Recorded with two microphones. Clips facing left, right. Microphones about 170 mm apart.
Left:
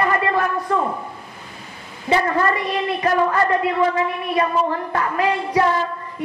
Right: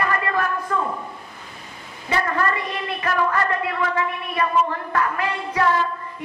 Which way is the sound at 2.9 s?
25° left (ahead or behind).